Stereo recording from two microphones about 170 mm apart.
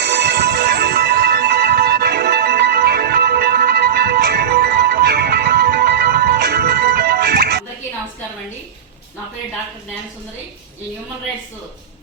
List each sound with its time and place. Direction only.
0.0 s music: 75° right (ahead or behind)